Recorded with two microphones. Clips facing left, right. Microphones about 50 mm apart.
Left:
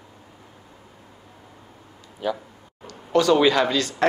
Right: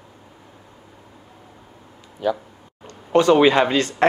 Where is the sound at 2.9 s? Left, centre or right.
Right.